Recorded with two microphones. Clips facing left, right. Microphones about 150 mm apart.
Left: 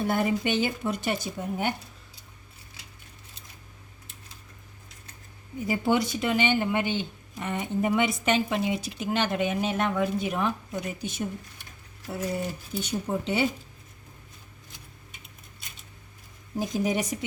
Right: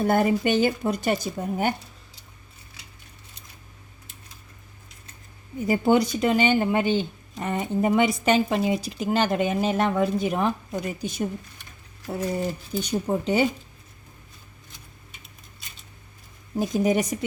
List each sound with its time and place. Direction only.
0.0 s speech: 45° right (ahead or behind)
5.6 s speech: 45° right (ahead or behind)
12.8 s speech: 40° right (ahead or behind)
16.6 s speech: 50° right (ahead or behind)